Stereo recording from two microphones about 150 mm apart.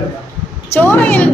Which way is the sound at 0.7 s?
15° left (ahead or behind).